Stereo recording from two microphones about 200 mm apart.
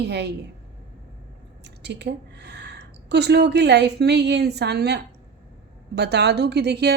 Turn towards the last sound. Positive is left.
turn(degrees=-55)  # may be behind; listen again after turning